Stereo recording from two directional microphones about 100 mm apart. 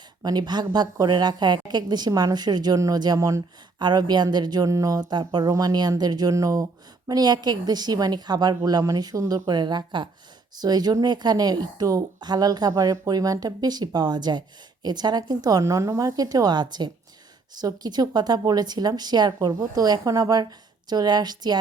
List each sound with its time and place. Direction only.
0.2 s a woman's voice: 40° right (ahead or behind)
3.8 s a woman's voice: 50° right (ahead or behind)